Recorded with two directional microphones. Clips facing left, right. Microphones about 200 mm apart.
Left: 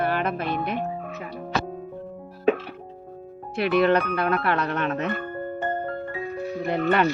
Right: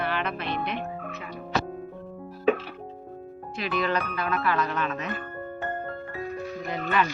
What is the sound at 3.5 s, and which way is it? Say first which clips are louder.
Speech: left 8 dB; 65° left (ahead or behind).